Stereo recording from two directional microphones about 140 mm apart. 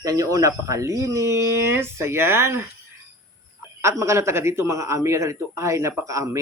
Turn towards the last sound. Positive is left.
turn(degrees=-25)  # may be behind; listen again after turning